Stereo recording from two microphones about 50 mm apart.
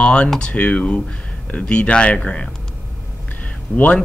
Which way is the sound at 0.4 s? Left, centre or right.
Left.